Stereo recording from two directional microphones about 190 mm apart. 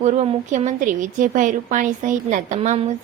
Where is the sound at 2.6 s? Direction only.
30° right (ahead or behind).